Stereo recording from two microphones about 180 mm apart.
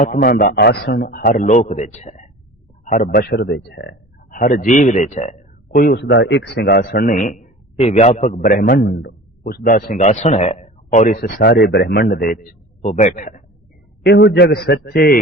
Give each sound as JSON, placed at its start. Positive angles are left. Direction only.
{"t": 0.1, "sound": "a man's voice", "side_deg": 55}
{"t": 5.7, "sound": "a man's voice", "side_deg": 60}
{"t": 8.9, "sound": "a man's voice", "side_deg": 70}
{"t": 12.8, "sound": "a man's voice", "side_deg": 45}
{"t": 14.0, "sound": "a man's voice", "side_deg": 70}